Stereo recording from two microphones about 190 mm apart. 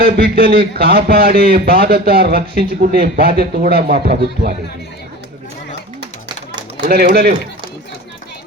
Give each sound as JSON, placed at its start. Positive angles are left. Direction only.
{"t": 0.0, "sound": "a man's voice", "side_deg": -50}
{"t": 6.8, "sound": "a man's voice", "side_deg": -55}